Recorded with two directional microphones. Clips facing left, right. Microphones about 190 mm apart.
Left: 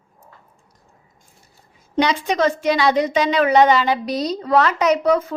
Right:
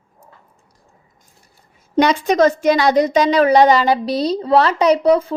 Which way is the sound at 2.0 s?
45° right (ahead or behind).